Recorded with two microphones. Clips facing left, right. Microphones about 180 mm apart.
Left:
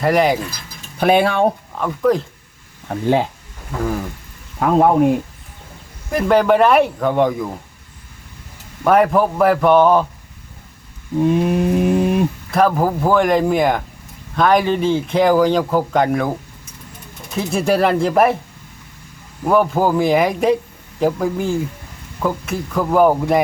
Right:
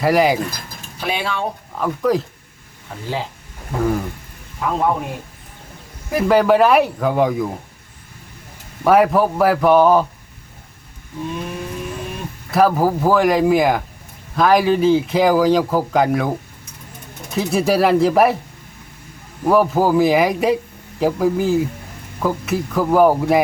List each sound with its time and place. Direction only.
0.0 s a man's voice: 5° right (ahead or behind)
0.9 s speech: 55° left (ahead or behind)
1.7 s a man's voice: centre (ahead or behind)
2.9 s a sound: 55° left (ahead or behind)
6.1 s a man's voice: 5° right (ahead or behind)
8.8 s a man's voice: 5° right (ahead or behind)
11.2 s a sound: 55° left (ahead or behind)
12.5 s a man's voice: 5° right (ahead or behind)
19.5 s a man's voice: 5° right (ahead or behind)